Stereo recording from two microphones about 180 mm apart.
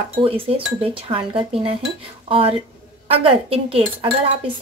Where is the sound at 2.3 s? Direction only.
30° right (ahead or behind).